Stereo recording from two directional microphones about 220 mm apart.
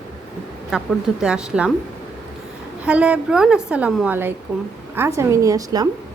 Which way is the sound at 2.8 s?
5° right (ahead or behind).